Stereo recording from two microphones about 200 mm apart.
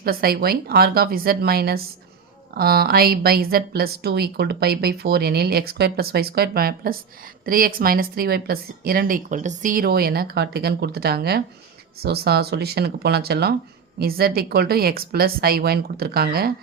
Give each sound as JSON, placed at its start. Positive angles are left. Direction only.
{"t": 0.0, "sound": "a woman's voice", "side_deg": -50}